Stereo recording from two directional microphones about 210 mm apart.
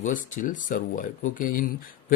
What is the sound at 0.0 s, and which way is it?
Speech, 40° left (ahead or behind).